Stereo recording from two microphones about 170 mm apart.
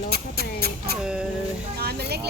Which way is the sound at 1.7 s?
70° right (ahead or behind).